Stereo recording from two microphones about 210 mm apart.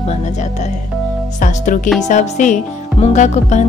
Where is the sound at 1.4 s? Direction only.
35° left (ahead or behind).